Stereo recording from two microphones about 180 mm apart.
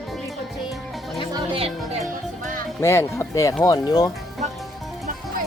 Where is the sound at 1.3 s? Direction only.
30° right (ahead or behind).